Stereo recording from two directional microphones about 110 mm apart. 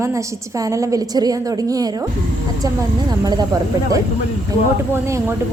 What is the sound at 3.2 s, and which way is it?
Speech, 40° right (ahead or behind).